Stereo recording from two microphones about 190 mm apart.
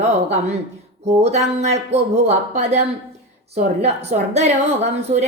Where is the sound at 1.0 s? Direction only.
35° right (ahead or behind).